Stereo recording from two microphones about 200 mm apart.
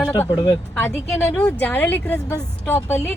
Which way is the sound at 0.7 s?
5° left (ahead or behind).